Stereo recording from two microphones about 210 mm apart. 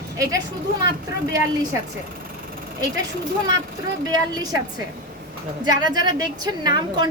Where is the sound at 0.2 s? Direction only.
15° right (ahead or behind).